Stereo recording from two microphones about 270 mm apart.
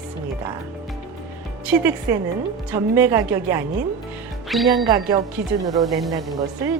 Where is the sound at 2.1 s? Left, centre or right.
Centre.